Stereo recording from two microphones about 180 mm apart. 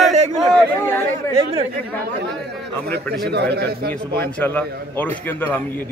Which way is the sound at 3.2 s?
65° right (ahead or behind).